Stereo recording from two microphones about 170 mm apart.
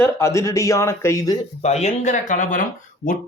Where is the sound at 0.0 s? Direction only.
15° left (ahead or behind).